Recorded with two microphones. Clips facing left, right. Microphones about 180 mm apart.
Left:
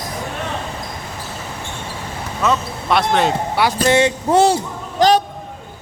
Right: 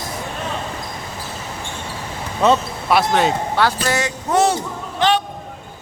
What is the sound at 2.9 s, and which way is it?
Speech, centre (ahead or behind).